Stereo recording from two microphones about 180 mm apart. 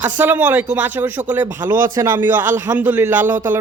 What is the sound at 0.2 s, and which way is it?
A man's voice, 10° right (ahead or behind).